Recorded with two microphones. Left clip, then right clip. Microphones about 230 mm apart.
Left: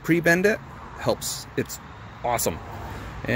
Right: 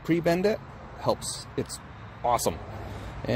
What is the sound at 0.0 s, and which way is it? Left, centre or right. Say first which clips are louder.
Speech: left 5 dB; centre.